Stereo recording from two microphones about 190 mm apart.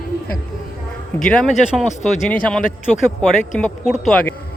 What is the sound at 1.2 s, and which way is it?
Speech, 5° left (ahead or behind).